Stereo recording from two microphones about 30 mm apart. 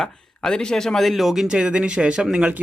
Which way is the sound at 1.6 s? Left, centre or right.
Right.